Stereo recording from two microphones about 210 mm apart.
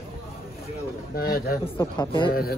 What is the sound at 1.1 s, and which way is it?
Speech, 45° left (ahead or behind).